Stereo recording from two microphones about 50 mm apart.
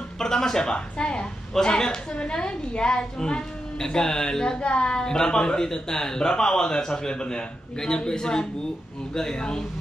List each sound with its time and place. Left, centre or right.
0.2 s a woman's voice: centre